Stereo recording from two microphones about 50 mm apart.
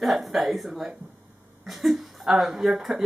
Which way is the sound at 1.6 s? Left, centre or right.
Centre.